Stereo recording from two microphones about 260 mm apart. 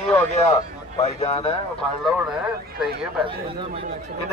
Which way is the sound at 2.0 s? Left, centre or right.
Centre.